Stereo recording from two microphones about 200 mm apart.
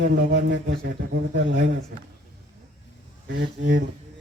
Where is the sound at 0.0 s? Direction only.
60° right (ahead or behind).